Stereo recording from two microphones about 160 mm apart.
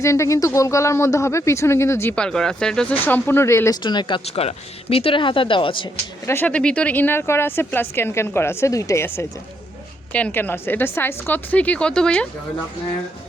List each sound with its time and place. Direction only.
0.0 s speech: 20° left (ahead or behind)
3.8 s speech: 30° left (ahead or behind)
6.2 s speech: 10° left (ahead or behind)